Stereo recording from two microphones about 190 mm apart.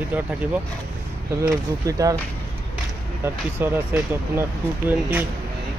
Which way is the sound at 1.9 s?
15° right (ahead or behind).